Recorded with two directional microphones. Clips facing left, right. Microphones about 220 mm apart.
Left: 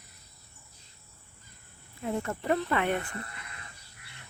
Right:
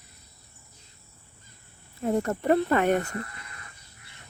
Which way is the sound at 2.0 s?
40° right (ahead or behind).